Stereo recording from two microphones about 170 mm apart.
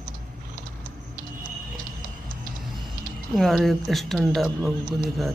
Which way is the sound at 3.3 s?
Centre (ahead or behind).